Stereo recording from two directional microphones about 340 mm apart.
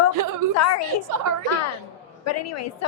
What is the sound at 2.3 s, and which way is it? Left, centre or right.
Speech, left.